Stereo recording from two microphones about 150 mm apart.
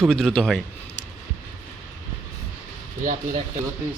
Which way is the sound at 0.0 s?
Centre (ahead or behind).